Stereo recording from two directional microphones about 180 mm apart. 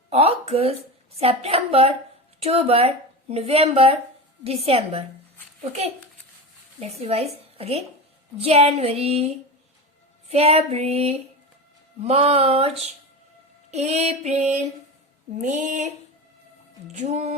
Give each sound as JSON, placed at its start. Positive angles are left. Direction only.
{"t": 0.1, "sound": "speech", "side_deg": -35}
{"t": 6.7, "sound": "a woman's voice", "side_deg": -35}
{"t": 15.4, "sound": "a sound", "side_deg": -45}
{"t": 16.9, "sound": "speech", "side_deg": -40}